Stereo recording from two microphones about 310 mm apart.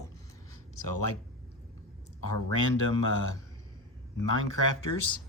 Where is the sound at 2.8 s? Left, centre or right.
Left.